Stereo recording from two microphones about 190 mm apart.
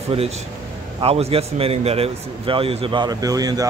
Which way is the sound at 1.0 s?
30° right (ahead or behind).